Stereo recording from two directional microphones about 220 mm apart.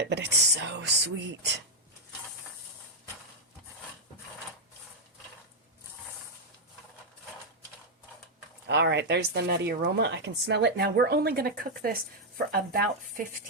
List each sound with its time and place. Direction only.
0.0 s speech: 50° right (ahead or behind)
8.6 s speech: 50° right (ahead or behind)